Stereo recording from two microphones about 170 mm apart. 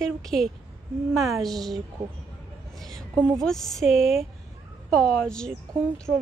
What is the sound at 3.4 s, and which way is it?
A woman's voice, 5° left (ahead or behind).